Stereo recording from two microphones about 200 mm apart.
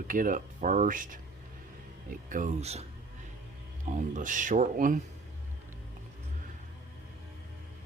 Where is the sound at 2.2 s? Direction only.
40° right (ahead or behind).